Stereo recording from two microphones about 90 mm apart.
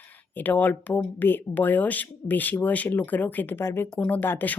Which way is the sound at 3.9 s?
15° left (ahead or behind).